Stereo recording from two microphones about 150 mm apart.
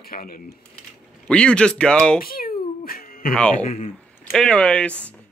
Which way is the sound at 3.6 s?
55° left (ahead or behind).